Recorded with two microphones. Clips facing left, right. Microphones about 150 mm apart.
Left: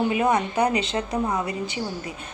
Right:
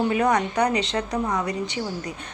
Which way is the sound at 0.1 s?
25° left (ahead or behind).